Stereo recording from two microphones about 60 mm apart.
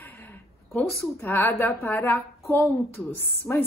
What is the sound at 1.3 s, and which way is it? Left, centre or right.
A woman's voice, left.